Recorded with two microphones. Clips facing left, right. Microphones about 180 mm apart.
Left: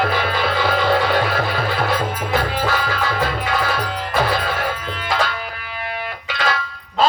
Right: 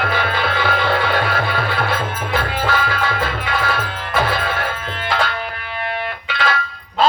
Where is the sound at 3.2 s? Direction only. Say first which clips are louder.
Left 1 dB; 45° left (ahead or behind).